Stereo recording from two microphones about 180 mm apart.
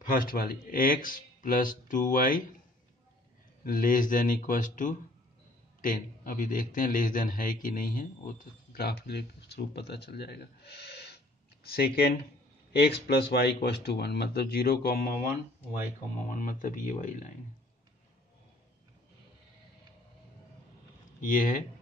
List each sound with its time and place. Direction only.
0.1 s a man's voice: 55° left (ahead or behind)
3.6 s a man's voice: 50° left (ahead or behind)
9.0 s a man's voice: 65° left (ahead or behind); by 17.3 s 45° left (ahead or behind)
21.2 s a man's voice: 50° left (ahead or behind)